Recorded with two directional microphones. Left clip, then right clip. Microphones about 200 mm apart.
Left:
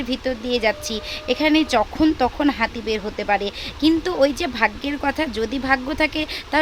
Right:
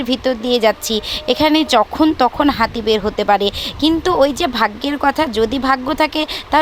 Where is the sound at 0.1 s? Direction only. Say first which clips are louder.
Right 7 dB; 20° right (ahead or behind).